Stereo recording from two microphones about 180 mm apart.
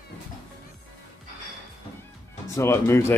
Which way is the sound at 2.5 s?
15° left (ahead or behind).